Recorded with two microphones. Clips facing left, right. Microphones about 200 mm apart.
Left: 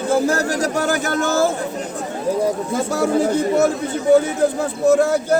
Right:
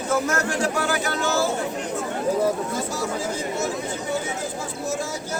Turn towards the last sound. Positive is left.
turn(degrees=60)  # may be behind; listen again after turning